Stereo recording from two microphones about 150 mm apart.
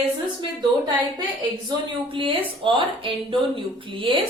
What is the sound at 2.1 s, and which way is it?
Speech, 35° right (ahead or behind).